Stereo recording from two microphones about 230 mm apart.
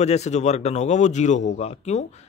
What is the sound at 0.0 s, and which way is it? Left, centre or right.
Speech, left.